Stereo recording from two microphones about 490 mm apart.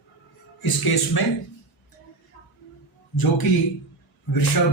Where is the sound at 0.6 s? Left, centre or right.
Left.